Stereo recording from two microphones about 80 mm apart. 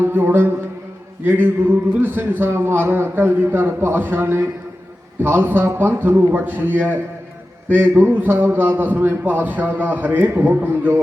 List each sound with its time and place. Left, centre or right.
0.0 s a man's voice: right